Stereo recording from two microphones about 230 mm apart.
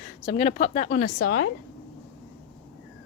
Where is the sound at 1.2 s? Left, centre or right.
Left.